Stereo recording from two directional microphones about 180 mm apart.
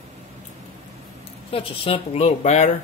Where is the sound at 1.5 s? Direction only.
30° left (ahead or behind).